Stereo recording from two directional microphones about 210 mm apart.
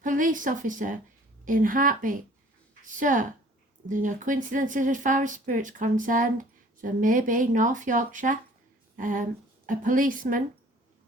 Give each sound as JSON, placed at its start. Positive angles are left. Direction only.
{"t": 0.0, "sound": "speech", "side_deg": -40}